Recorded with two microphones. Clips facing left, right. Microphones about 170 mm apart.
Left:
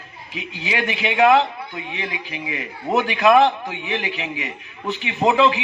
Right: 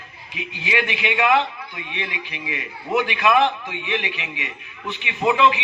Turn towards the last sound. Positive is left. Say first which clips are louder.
# left 2 dB
turn(degrees=35)  # may be behind; listen again after turning